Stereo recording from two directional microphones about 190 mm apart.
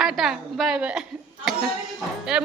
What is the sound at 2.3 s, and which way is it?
Speech, 5° right (ahead or behind).